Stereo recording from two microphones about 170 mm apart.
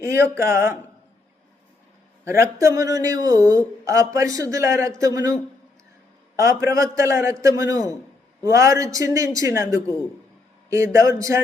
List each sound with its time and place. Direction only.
0.0 s speech: 15° right (ahead or behind)
2.2 s speech: 15° right (ahead or behind)